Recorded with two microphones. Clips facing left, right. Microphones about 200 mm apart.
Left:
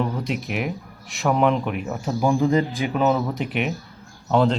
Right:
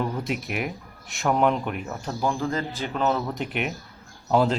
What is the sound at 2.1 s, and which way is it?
Speech, 15° left (ahead or behind).